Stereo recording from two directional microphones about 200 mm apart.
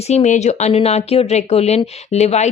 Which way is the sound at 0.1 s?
35° left (ahead or behind).